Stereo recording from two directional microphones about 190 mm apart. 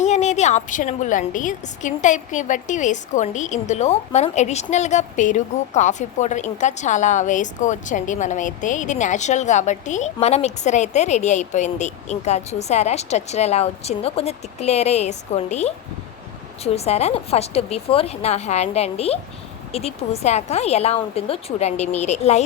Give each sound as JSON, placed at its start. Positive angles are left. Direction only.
{"t": 0.0, "sound": "a woman's voice", "side_deg": 40}